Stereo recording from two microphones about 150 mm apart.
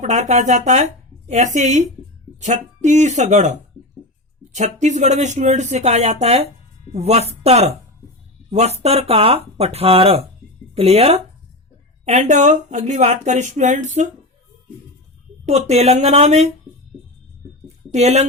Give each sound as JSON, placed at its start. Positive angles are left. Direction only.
{"t": 0.0, "sound": "speech", "side_deg": -50}
{"t": 15.4, "sound": "speech", "side_deg": -45}
{"t": 17.9, "sound": "speech", "side_deg": -45}